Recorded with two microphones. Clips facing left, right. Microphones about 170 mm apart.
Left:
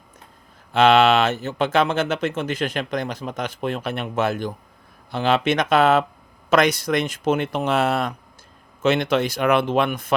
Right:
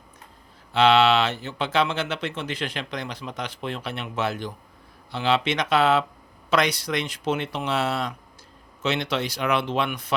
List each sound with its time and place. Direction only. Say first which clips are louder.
0.7 s speech: left 3 dB; 50° left (ahead or behind)